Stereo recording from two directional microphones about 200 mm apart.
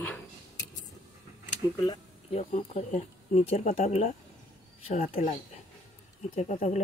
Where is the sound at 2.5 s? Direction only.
35° left (ahead or behind).